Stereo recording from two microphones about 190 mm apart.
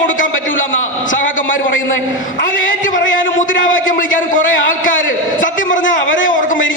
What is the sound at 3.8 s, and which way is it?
A woman's voice, 45° left (ahead or behind).